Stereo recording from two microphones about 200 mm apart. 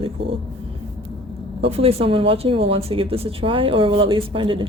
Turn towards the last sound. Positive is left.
turn(degrees=-25)  # may be behind; listen again after turning